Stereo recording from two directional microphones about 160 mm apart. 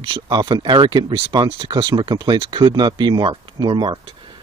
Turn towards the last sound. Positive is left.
turn(degrees=-30)  # may be behind; listen again after turning